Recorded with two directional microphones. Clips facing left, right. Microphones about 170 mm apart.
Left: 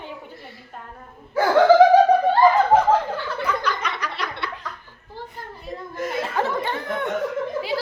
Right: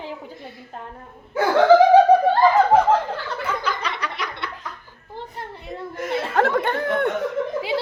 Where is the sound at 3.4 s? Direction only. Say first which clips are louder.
Left 1 dB; 30° right (ahead or behind).